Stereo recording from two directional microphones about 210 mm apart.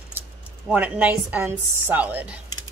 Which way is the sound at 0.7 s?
10° right (ahead or behind).